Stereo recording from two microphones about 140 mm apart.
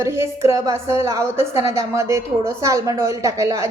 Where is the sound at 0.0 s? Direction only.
20° right (ahead or behind).